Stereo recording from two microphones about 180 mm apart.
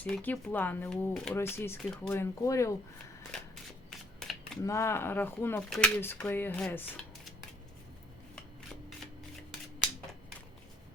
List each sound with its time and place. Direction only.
0.0 s speech: 10° left (ahead or behind)
3.3 s shuffling cards: centre (ahead or behind)
4.6 s speech: 15° left (ahead or behind)